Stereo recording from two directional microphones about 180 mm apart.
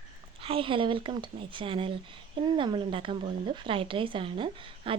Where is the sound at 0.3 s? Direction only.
30° right (ahead or behind).